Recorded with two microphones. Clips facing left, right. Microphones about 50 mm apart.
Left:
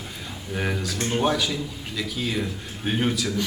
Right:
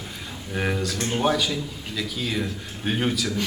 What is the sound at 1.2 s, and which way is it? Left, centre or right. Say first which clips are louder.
A man's voice: right 2 dB; centre.